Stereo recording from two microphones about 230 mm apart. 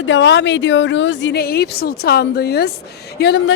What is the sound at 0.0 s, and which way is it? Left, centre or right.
Speech, left.